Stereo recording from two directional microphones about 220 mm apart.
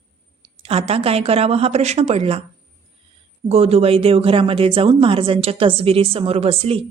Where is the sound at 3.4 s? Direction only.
25° right (ahead or behind).